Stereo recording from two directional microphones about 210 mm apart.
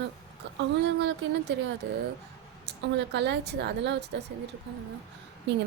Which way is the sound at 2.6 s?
55° right (ahead or behind).